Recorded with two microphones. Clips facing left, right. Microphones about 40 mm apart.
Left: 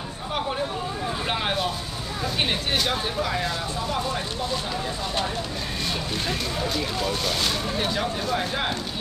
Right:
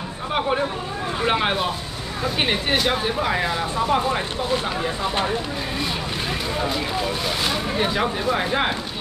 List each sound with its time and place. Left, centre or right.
1.2 s vehicle: right
2.3 s speech: centre
6.6 s speech: centre